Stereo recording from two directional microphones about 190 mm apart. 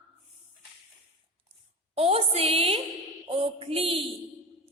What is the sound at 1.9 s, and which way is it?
A woman's voice, 30° right (ahead or behind).